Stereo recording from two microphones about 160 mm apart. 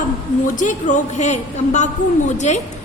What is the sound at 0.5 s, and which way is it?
A woman's voice, 50° left (ahead or behind).